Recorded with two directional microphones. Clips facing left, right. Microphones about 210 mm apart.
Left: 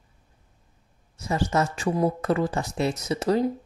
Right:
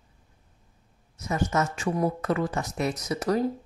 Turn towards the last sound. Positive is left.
turn(degrees=25)  # may be behind; listen again after turning